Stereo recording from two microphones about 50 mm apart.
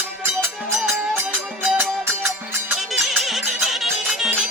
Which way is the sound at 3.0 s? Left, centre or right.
Centre.